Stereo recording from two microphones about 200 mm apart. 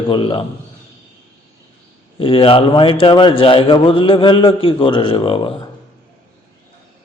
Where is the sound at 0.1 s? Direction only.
25° left (ahead or behind).